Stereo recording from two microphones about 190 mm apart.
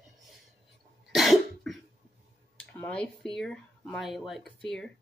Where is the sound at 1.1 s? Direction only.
Centre (ahead or behind).